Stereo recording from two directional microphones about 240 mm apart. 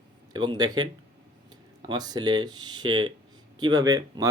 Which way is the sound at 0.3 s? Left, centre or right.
Centre.